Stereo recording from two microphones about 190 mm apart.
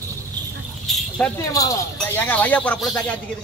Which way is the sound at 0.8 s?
Centre (ahead or behind).